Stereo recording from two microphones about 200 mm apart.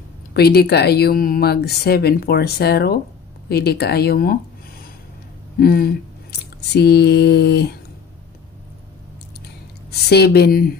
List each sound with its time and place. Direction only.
0.3 s speech: 50° left (ahead or behind)
5.6 s speech: 50° left (ahead or behind)
6.7 s a sound: 55° left (ahead or behind)
9.8 s speech: 55° left (ahead or behind)